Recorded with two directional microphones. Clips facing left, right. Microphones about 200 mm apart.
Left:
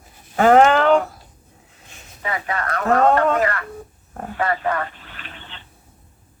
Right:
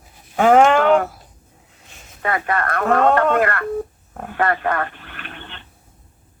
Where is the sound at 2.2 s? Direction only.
60° right (ahead or behind).